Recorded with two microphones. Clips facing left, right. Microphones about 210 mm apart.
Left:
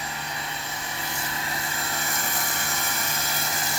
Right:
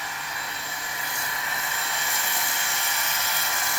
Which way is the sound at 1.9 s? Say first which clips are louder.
Left 2 dB; 45° left (ahead or behind).